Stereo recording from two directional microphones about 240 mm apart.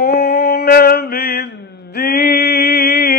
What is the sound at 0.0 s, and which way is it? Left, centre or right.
Mantra, left.